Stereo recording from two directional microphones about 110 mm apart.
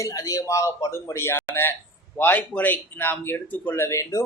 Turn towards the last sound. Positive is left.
turn(degrees=25)  # may be behind; listen again after turning